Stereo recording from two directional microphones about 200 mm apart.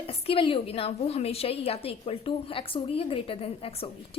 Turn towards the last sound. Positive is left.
turn(degrees=30)  # may be behind; listen again after turning